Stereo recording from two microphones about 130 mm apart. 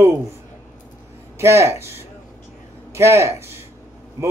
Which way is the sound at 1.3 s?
20° right (ahead or behind).